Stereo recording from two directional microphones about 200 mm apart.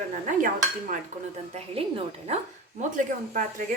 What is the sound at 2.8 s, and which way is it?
Speech, 40° right (ahead or behind).